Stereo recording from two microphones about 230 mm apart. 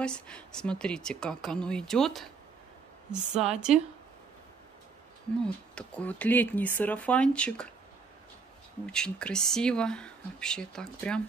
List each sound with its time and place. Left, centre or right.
0.0 s speech: centre
5.4 s speech: centre
8.8 s speech: centre